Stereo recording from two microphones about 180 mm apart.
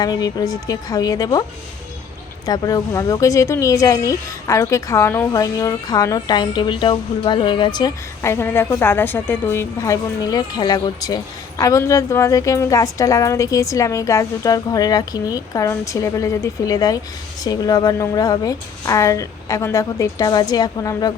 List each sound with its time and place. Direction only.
0.0 s a woman's voice: 20° left (ahead or behind)
2.5 s a woman's voice: 20° left (ahead or behind)